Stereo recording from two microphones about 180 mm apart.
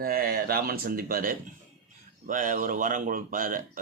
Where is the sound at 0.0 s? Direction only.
55° right (ahead or behind).